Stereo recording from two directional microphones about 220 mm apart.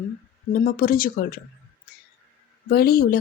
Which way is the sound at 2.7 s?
45° left (ahead or behind).